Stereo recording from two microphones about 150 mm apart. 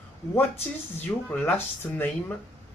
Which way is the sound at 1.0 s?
15° left (ahead or behind).